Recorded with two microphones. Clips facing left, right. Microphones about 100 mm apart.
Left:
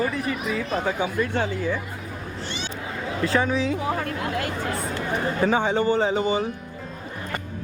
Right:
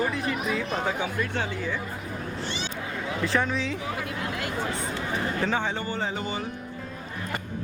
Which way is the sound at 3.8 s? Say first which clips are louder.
Left 5 dB; 50° left (ahead or behind).